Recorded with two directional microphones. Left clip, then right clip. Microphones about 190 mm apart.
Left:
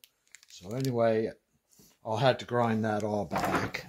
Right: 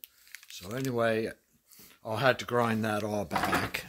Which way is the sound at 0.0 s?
5° left (ahead or behind).